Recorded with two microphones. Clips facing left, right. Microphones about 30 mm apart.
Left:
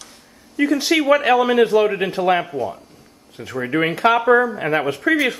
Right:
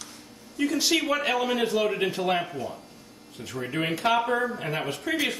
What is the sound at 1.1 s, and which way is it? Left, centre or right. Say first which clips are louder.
Speech: left 10 dB; left.